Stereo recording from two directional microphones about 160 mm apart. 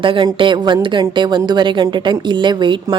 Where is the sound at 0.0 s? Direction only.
30° right (ahead or behind).